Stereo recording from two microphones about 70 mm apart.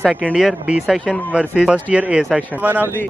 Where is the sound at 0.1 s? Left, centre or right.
Centre.